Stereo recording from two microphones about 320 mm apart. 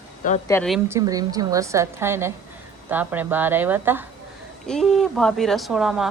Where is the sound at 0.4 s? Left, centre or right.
Centre.